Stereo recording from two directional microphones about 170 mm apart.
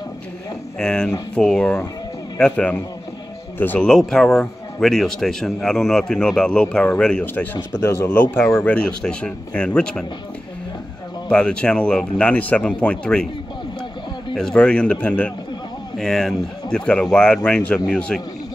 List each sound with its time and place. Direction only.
0.7 s speech: 5° left (ahead or behind)
7.5 s speech: 15° left (ahead or behind)
11.2 s speech: 5° left (ahead or behind)
14.3 s speech: 5° left (ahead or behind)